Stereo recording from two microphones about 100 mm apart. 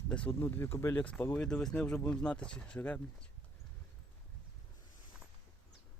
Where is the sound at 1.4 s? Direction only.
10° left (ahead or behind).